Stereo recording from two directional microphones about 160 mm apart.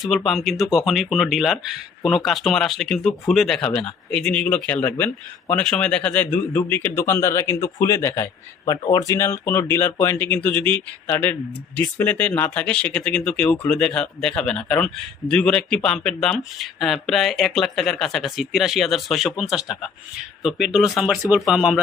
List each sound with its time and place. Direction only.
0.3 s a man's voice: centre (ahead or behind)